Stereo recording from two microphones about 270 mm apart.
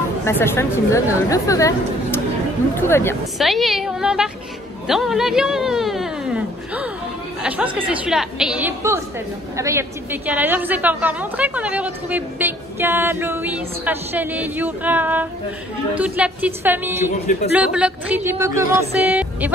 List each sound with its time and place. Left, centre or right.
0.2 s a woman's voice: centre
17.1 s speech: left
17.5 s a woman's voice: centre